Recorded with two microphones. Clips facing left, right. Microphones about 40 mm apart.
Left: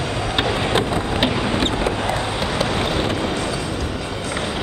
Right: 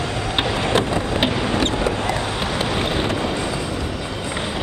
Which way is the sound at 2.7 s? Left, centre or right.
Centre.